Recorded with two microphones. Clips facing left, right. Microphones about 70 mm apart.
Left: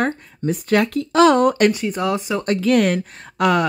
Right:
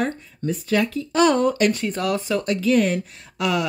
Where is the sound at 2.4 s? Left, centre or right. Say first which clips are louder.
Left 4 dB; left.